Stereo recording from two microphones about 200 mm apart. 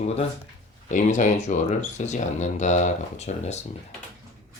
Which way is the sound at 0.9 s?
40° left (ahead or behind).